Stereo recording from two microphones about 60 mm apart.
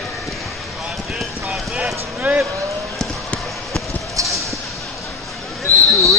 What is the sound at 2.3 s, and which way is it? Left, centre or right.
Speech, right.